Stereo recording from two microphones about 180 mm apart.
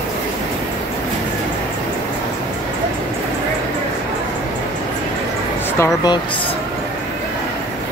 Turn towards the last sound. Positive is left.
turn(degrees=20)  # may be behind; listen again after turning